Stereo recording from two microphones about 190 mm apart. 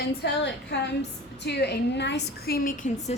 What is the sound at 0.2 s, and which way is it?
A woman's voice, 65° left (ahead or behind).